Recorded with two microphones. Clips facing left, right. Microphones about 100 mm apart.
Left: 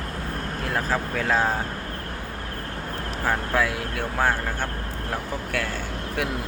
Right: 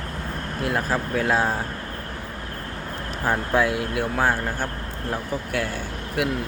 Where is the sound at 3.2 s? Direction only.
20° right (ahead or behind).